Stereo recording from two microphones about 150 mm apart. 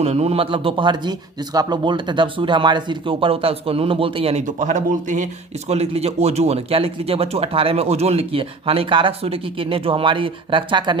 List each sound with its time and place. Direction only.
0.0 s speech: 45° right (ahead or behind)
4.4 s speech: 55° right (ahead or behind); by 10.9 s 30° right (ahead or behind)